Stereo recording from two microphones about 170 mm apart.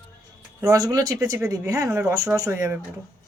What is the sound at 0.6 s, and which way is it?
A woman's voice, 20° right (ahead or behind).